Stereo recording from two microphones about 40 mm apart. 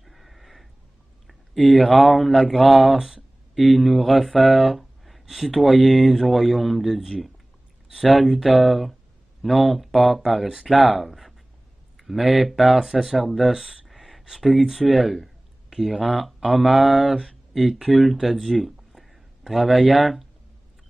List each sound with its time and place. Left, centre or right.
0.0 s a sound: centre
1.2 s speech: centre
8.0 s speech: centre
13.5 s speech: centre
13.8 s a sound: centre
14.9 s speech: centre